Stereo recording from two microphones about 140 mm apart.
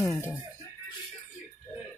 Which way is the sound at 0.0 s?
20° left (ahead or behind).